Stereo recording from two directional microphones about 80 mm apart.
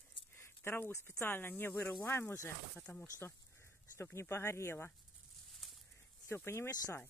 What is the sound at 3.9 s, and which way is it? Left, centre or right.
Speech, left.